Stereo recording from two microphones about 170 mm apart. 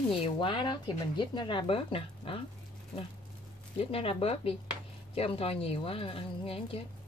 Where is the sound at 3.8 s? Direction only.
35° left (ahead or behind).